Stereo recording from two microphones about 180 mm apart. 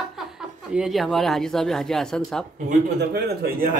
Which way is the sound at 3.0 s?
65° right (ahead or behind).